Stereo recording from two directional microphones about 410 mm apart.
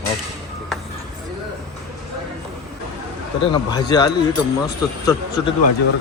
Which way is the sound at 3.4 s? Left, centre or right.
Centre.